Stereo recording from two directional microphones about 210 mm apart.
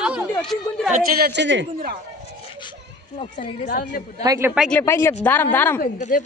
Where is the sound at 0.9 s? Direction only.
50° right (ahead or behind).